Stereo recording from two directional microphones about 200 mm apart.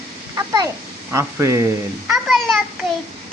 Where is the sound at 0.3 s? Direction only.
20° right (ahead or behind).